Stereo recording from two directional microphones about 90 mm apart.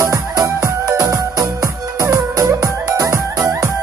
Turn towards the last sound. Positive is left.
turn(degrees=-35)  # may be behind; listen again after turning